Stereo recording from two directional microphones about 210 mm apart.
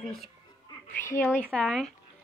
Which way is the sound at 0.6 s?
15° left (ahead or behind).